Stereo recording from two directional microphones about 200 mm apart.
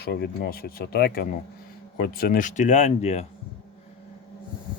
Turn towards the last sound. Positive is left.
turn(degrees=35)  # may be behind; listen again after turning